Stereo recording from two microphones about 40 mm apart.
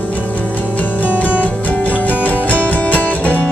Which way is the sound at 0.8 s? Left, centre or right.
Left.